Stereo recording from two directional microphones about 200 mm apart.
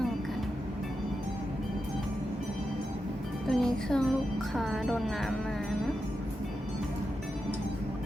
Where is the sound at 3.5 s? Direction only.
Centre (ahead or behind).